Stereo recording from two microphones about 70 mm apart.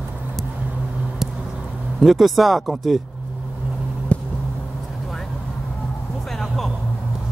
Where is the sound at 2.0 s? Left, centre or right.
Centre.